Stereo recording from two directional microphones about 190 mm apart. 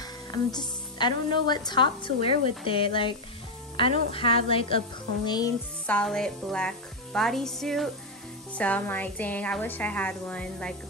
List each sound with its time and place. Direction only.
0.0 s music: 20° left (ahead or behind)
1.5 s a woman's voice: 20° left (ahead or behind)
5.9 s a woman's voice: 5° left (ahead or behind)